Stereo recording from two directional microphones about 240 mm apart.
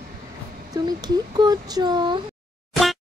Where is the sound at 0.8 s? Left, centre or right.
Centre.